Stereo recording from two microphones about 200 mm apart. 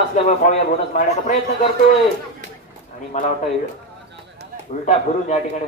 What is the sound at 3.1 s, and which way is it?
Speech, 35° left (ahead or behind).